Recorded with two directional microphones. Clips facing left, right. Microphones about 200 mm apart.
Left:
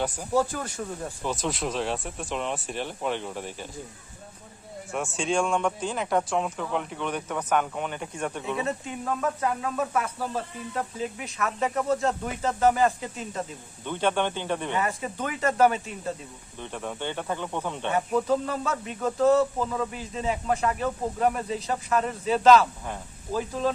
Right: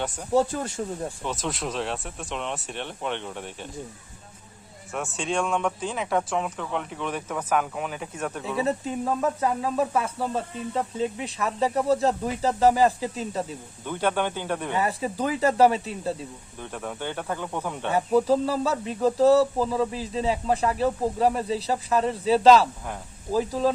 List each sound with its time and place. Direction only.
0.0 s speech: centre (ahead or behind)
0.3 s speech: 25° right (ahead or behind)
1.2 s speech: centre (ahead or behind)
4.9 s speech: centre (ahead or behind)
8.5 s speech: 35° right (ahead or behind)
13.8 s speech: 5° right (ahead or behind)
14.8 s speech: 30° right (ahead or behind)
16.6 s speech: 5° right (ahead or behind)
17.9 s speech: 30° right (ahead or behind)